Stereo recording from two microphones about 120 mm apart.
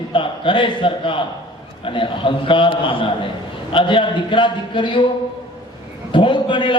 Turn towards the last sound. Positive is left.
turn(degrees=40)  # may be behind; listen again after turning